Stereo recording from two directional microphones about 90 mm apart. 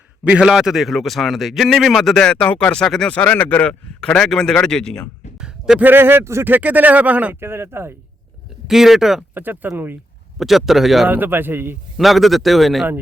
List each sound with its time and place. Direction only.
0.3 s a man's voice: 10° right (ahead or behind); by 3.2 s 5° left (ahead or behind)
3.2 s speech: 15° left (ahead or behind)
5.4 s a sound: 10° right (ahead or behind)
5.8 s speech: 25° right (ahead or behind)
7.3 s speech: 25° right (ahead or behind)
8.6 s a man's voice: 5° right (ahead or behind)
9.3 s speech: 20° right (ahead or behind)
10.3 s a man's voice: 5° right (ahead or behind)
11.1 s speech: 20° right (ahead or behind)
11.9 s a man's voice: centre (ahead or behind)